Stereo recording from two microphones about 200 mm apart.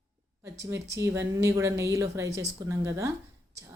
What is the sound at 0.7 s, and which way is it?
A woman's voice, 15° right (ahead or behind).